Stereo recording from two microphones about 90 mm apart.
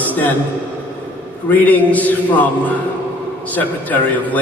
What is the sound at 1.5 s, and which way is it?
Speech, 20° left (ahead or behind).